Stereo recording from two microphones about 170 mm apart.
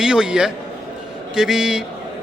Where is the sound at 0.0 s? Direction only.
5° right (ahead or behind).